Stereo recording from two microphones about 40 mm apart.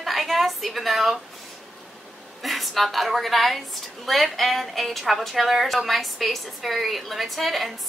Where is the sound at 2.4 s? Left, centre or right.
Centre.